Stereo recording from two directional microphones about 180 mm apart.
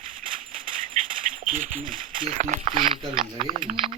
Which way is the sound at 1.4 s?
45° right (ahead or behind).